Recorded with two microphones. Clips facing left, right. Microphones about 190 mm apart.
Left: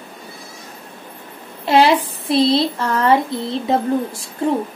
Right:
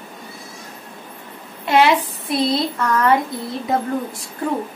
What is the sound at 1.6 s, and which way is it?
Speech, 30° left (ahead or behind).